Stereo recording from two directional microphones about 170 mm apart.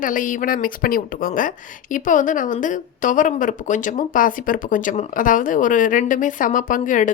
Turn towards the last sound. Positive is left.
turn(degrees=50)  # may be behind; listen again after turning